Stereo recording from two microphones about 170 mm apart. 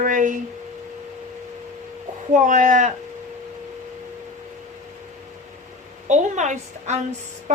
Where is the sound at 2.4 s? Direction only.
50° right (ahead or behind).